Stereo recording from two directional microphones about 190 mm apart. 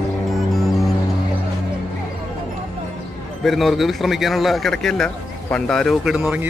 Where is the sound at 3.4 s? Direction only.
Centre (ahead or behind).